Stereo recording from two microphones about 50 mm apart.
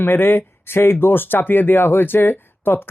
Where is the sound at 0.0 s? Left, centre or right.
Left.